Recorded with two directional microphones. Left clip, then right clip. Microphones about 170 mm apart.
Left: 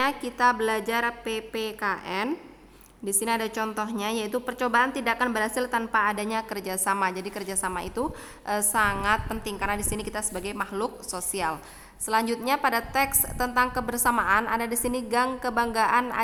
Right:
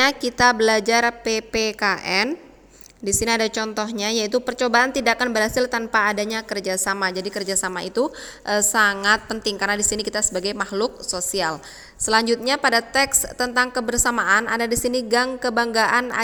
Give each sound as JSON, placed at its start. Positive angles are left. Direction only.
{"t": 0.0, "sound": "a woman's voice", "side_deg": -25}